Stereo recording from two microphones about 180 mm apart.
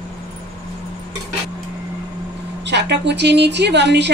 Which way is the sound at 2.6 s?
70° right (ahead or behind).